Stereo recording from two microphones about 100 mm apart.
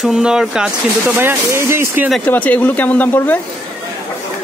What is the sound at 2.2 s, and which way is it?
Speech, 15° left (ahead or behind).